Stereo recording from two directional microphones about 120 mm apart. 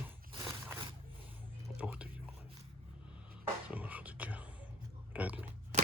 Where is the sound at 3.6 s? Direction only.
10° right (ahead or behind).